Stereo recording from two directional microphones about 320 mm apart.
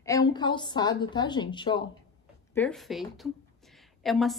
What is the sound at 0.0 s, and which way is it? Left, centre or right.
A woman's voice, centre.